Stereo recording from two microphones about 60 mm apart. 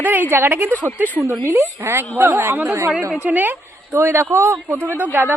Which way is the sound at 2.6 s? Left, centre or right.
Right.